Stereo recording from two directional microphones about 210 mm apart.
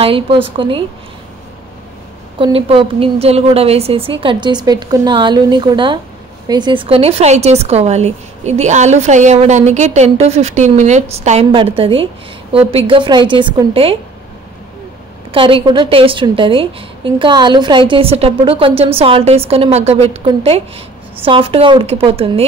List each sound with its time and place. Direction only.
0.0 s a woman's voice: 25° right (ahead or behind)
2.3 s a woman's voice: 25° right (ahead or behind)
15.3 s a woman's voice: 25° right (ahead or behind)